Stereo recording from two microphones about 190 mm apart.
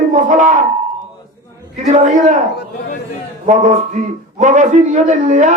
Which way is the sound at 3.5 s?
40° right (ahead or behind).